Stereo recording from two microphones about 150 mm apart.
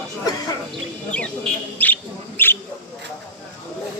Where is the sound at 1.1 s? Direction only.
10° left (ahead or behind).